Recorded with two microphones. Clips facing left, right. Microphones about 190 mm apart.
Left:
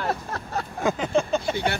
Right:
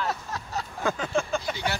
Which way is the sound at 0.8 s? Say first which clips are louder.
Left 4 dB; 20° left (ahead or behind).